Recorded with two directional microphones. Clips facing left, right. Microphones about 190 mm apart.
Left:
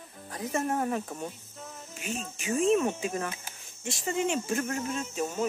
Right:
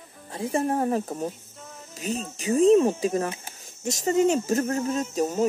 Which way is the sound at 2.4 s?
35° right (ahead or behind).